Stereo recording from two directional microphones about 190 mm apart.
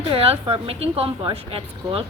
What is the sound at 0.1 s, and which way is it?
Speech, 30° right (ahead or behind).